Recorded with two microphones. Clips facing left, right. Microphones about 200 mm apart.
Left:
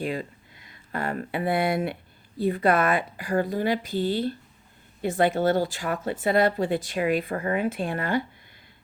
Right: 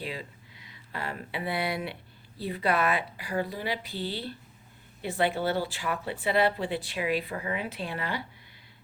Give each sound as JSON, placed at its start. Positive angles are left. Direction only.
{"t": 0.0, "sound": "speech", "side_deg": 50}